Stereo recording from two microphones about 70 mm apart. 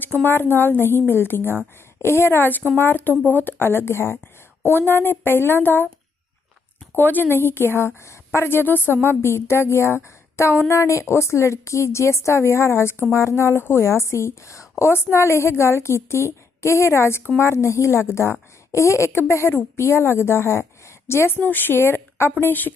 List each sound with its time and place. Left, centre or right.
0.2 s a woman's voice: left
6.9 s a woman's voice: left